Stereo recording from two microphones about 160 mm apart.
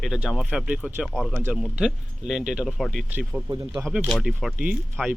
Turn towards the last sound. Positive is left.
turn(degrees=-5)  # may be behind; listen again after turning